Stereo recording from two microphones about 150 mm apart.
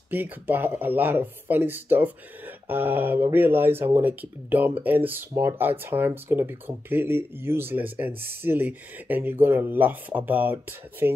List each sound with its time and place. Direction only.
0.1 s speech: 10° right (ahead or behind)